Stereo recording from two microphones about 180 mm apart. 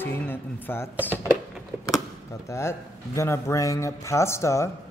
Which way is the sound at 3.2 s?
15° left (ahead or behind).